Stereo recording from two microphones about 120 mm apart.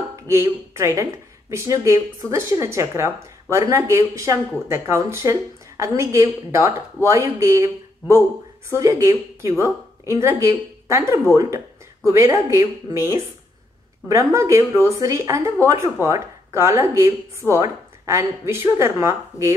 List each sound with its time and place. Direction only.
0.1 s a woman's voice: 25° right (ahead or behind)